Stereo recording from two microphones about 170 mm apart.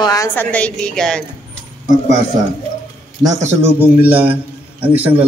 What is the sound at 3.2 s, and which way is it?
A man's voice, 20° right (ahead or behind).